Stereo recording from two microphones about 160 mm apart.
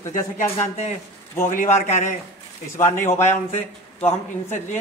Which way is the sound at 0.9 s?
50° left (ahead or behind).